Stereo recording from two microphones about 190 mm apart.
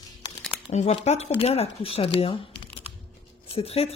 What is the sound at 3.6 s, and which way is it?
Speech, 30° left (ahead or behind).